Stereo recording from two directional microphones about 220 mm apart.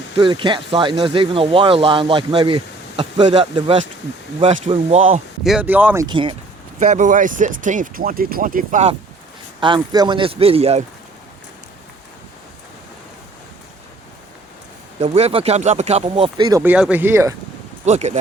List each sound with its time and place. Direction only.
0.2 s speech: 20° right (ahead or behind)
5.4 s speech: 5° right (ahead or behind); by 6.3 s 20° right (ahead or behind)
6.7 s speech: 30° right (ahead or behind)
9.6 s speech: 20° right (ahead or behind)
15.0 s speech: 25° right (ahead or behind); by 17.3 s 10° right (ahead or behind)
17.8 s speech: 30° right (ahead or behind)